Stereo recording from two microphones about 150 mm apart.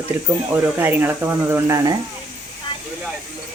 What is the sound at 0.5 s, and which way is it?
Speech, 15° right (ahead or behind).